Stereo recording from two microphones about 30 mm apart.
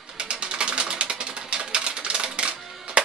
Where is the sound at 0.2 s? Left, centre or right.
Right.